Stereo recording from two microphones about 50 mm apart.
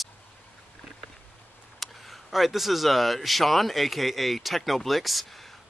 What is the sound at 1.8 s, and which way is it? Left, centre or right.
Speech, centre.